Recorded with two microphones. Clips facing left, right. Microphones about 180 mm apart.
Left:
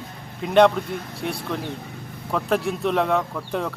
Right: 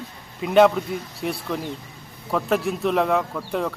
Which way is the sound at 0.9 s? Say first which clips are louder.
Right 1 dB; 60° left (ahead or behind).